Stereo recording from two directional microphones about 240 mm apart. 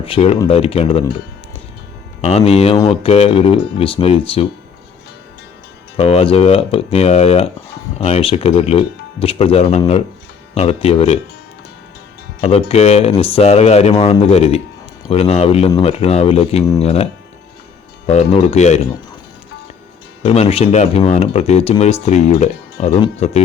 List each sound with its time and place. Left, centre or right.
0.0 s speech: left
2.2 s speech: left
6.0 s speech: left
12.4 s speech: left
20.2 s speech: left